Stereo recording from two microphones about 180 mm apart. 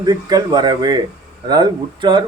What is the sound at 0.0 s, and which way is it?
Speech, 20° right (ahead or behind).